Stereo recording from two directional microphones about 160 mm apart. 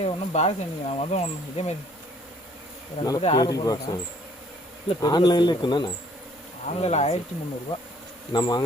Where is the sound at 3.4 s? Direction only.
25° left (ahead or behind).